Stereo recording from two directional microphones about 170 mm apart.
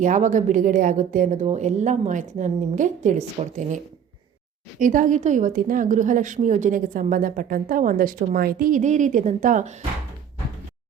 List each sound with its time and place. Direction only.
0.0 s a woman's voice: 50° right (ahead or behind)
4.8 s a woman's voice: 50° right (ahead or behind)